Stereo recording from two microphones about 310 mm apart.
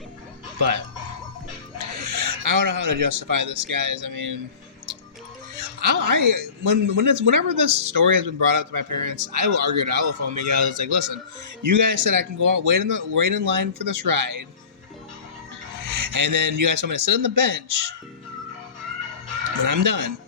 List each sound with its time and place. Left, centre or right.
1.8 s speech: right
5.9 s a man's voice: right
11.6 s speech: right
16.0 s a man's voice: right
19.6 s a man's voice: right